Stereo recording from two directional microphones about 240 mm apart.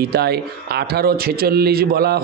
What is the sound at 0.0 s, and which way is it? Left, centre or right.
Speech, right.